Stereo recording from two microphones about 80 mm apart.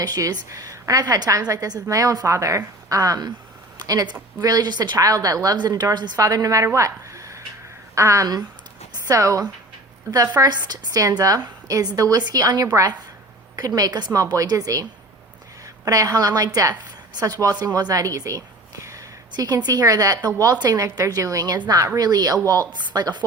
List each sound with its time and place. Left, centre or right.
0.0 s a woman's voice: right
6.1 s a woman's voice: right
6.7 s a sound: right
7.9 s a woman's voice: right
10.4 s a woman's voice: right